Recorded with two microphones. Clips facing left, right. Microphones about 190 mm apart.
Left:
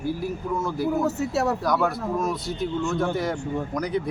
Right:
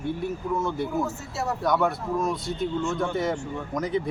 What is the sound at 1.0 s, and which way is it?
Speech, 65° left (ahead or behind).